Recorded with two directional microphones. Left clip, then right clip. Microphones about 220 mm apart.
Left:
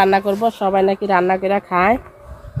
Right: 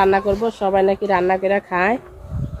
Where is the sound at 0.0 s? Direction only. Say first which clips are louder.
Left 1 dB; 50° left (ahead or behind).